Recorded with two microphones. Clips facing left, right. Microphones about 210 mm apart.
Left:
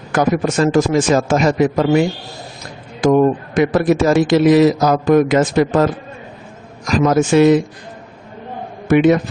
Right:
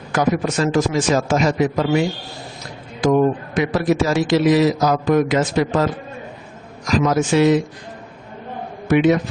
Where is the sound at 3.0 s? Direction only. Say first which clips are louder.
Left 3 dB; 50° left (ahead or behind).